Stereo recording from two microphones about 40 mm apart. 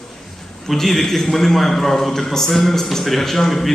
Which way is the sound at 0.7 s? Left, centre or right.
Centre.